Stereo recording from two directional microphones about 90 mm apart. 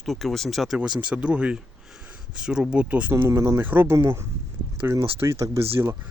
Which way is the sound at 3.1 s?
30° right (ahead or behind).